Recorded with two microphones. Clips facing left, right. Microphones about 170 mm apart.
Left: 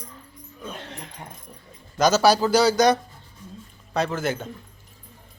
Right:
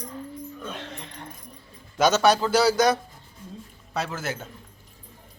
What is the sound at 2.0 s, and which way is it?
Speech, centre (ahead or behind).